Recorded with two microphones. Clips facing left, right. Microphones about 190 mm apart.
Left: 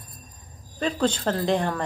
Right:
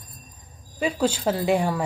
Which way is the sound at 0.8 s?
10° right (ahead or behind).